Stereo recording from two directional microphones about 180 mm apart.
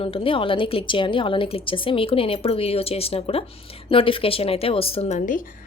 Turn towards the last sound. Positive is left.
turn(degrees=50)  # may be behind; listen again after turning